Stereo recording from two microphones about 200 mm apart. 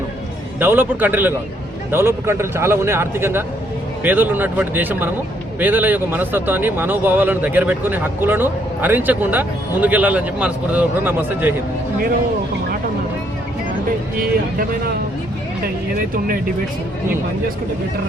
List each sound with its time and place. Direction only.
0.6 s speech: 10° right (ahead or behind)
14.2 s speech: 45° right (ahead or behind)